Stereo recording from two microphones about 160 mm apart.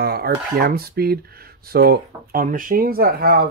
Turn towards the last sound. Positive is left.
turn(degrees=-80)